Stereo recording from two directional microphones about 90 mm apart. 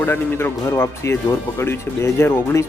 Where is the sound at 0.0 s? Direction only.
25° left (ahead or behind).